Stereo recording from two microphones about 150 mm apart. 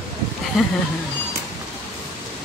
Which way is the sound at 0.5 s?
5° right (ahead or behind).